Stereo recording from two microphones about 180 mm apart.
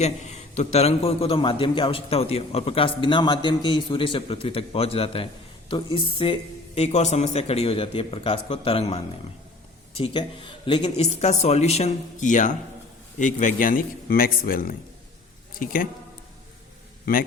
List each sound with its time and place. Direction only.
0.0 s a man's voice: 40° left (ahead or behind)
17.1 s a man's voice: 55° left (ahead or behind)